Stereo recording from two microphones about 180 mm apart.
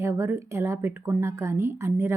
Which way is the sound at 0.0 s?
15° right (ahead or behind).